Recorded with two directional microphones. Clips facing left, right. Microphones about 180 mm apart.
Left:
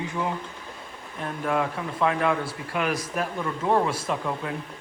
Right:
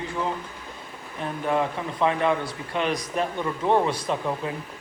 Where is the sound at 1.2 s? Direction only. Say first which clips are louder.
Right 1 dB; centre (ahead or behind).